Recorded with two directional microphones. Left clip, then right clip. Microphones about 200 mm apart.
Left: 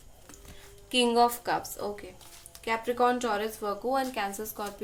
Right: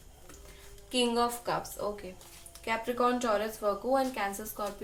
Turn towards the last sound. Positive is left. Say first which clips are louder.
# left 1 dB
turn(degrees=45)  # may be behind; listen again after turning